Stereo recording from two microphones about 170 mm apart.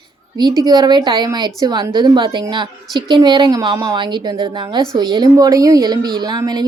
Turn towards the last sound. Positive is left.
turn(degrees=-25)  # may be behind; listen again after turning